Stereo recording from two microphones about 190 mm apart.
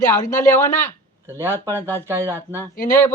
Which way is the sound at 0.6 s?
15° left (ahead or behind).